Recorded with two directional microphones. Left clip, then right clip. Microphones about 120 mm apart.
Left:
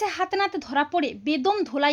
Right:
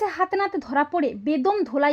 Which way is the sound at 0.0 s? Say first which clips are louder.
Right 1 dB; 45° right (ahead or behind).